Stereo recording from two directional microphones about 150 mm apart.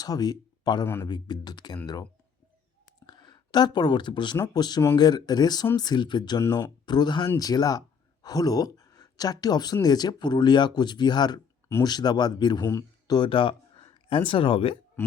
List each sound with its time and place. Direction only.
0.0 s speech: 25° left (ahead or behind)
3.1 s speech: 30° left (ahead or behind)
6.4 s speech: 15° left (ahead or behind)
6.8 s speech: 30° left (ahead or behind)
12.6 s speech: 15° left (ahead or behind)
13.1 s speech: 35° left (ahead or behind)
15.0 s a sound: 15° left (ahead or behind)